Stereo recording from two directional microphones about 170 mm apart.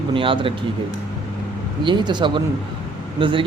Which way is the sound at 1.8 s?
25° right (ahead or behind).